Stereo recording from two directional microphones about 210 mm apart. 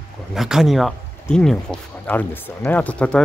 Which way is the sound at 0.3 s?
Centre (ahead or behind).